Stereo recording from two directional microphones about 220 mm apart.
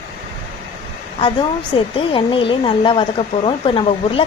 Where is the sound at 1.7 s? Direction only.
25° left (ahead or behind).